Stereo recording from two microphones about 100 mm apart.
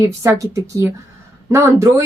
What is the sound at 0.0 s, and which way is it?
Speech, 30° right (ahead or behind).